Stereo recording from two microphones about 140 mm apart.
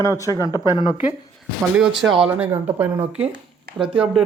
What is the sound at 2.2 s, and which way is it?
Speech, 10° right (ahead or behind).